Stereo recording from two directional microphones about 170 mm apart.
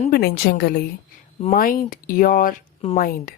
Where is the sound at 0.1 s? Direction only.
65° left (ahead or behind).